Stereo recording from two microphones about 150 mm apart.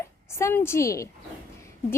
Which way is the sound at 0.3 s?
20° left (ahead or behind).